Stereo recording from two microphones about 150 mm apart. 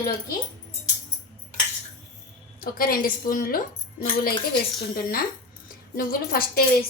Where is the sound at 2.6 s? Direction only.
75° left (ahead or behind).